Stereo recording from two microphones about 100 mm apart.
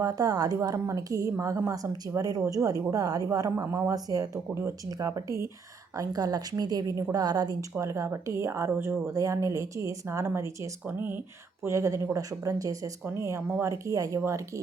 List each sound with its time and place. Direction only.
0.0 s a woman's voice: 40° right (ahead or behind)
7.9 s a woman's voice: 30° right (ahead or behind)